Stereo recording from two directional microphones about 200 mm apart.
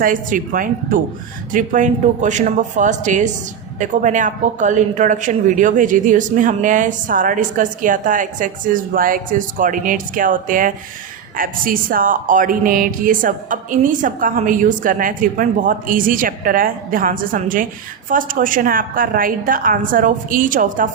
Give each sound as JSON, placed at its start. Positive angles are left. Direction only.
{"t": 0.0, "sound": "speech", "side_deg": -40}